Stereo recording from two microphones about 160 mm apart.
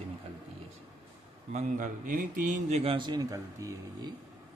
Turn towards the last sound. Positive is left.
turn(degrees=-20)  # may be behind; listen again after turning